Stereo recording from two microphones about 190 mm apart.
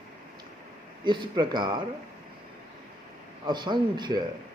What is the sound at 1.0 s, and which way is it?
Speech, 25° right (ahead or behind).